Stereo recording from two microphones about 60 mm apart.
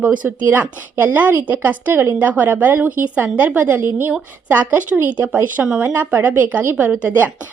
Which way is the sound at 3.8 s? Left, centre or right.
Right.